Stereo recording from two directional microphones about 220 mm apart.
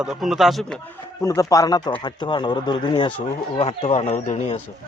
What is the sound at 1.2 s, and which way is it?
Speech, 15° left (ahead or behind).